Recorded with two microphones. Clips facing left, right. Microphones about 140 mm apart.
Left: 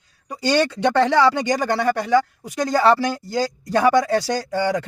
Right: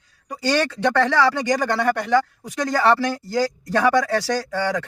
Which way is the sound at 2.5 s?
20° left (ahead or behind).